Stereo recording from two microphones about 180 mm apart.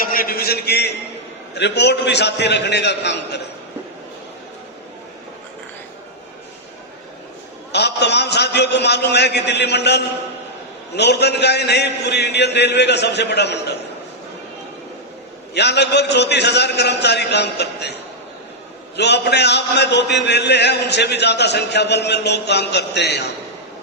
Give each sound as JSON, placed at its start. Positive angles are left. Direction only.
{"t": 0.0, "sound": "a man's voice", "side_deg": 55}
{"t": 7.7, "sound": "a man's voice", "side_deg": 70}
{"t": 15.5, "sound": "a man's voice", "side_deg": 70}
{"t": 18.9, "sound": "a man's voice", "side_deg": 70}